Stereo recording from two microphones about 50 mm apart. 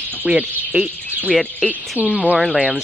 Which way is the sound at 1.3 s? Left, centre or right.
Centre.